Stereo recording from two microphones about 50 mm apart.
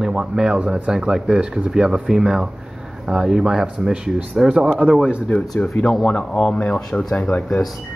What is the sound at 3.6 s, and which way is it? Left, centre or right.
Speech, right.